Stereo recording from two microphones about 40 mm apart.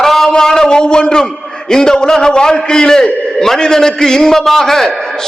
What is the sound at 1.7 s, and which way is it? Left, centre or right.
A man's voice, centre.